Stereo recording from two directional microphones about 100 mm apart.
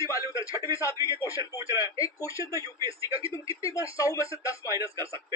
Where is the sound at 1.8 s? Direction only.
35° left (ahead or behind).